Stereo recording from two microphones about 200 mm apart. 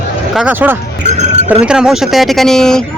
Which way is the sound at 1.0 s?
35° right (ahead or behind).